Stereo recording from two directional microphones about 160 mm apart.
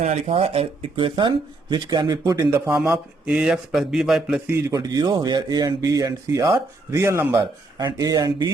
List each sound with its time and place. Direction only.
0.0 s speech: 40° right (ahead or behind); by 2.7 s 20° right (ahead or behind)
2.9 s speech: 5° right (ahead or behind)
4.4 s speech: 20° right (ahead or behind)